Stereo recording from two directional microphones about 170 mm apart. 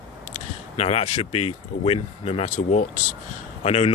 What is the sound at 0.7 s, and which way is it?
Speech, 35° left (ahead or behind).